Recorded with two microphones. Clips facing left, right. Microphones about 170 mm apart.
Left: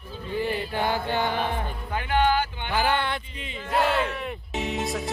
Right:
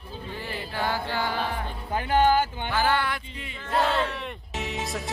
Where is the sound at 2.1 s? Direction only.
40° right (ahead or behind).